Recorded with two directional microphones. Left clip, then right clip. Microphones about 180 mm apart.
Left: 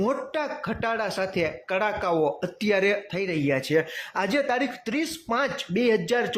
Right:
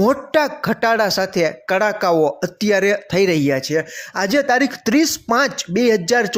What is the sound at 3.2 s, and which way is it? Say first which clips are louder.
Speech: right 11 dB; 40° right (ahead or behind).